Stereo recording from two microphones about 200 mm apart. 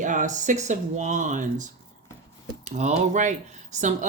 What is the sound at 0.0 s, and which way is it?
Speech, 40° right (ahead or behind).